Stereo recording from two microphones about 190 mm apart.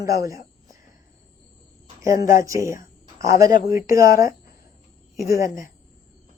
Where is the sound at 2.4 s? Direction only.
15° right (ahead or behind).